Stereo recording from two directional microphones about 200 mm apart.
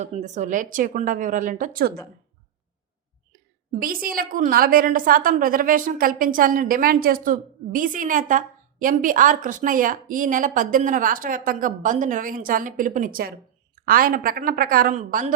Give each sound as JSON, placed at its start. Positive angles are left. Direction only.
{"t": 0.0, "sound": "speech", "side_deg": -35}
{"t": 3.8, "sound": "a woman's voice", "side_deg": -45}